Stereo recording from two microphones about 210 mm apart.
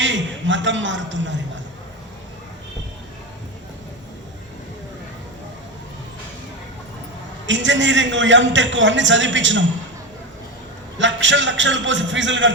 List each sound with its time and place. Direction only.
0.0 s a man's voice: 60° right (ahead or behind)
7.4 s a man's voice: 60° right (ahead or behind)
10.9 s a man's voice: 60° right (ahead or behind)